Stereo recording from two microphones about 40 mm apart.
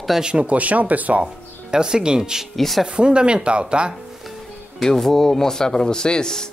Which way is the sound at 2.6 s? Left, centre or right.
Centre.